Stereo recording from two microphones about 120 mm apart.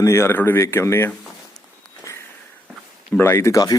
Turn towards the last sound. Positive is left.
turn(degrees=30)  # may be behind; listen again after turning